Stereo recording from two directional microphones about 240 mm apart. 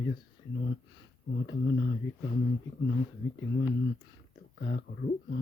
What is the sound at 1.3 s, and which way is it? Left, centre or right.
Wheeze, left.